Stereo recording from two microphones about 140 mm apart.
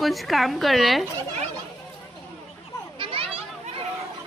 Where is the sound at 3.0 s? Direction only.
40° right (ahead or behind).